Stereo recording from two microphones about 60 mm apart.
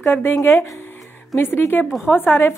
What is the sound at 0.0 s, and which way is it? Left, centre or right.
A woman's voice, left.